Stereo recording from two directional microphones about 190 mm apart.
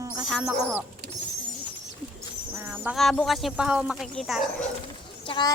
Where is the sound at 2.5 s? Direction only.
10° right (ahead or behind).